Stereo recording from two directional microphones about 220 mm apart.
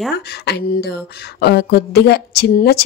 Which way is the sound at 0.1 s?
45° left (ahead or behind).